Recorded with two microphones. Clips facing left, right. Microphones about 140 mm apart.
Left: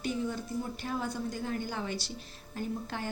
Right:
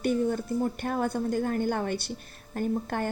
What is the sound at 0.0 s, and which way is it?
Speech, 55° right (ahead or behind).